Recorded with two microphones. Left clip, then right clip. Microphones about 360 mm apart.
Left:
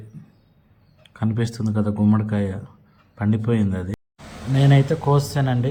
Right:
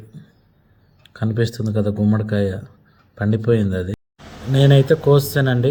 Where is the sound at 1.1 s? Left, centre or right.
Right.